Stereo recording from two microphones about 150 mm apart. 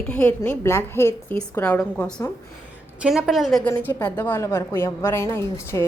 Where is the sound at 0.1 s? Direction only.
10° left (ahead or behind).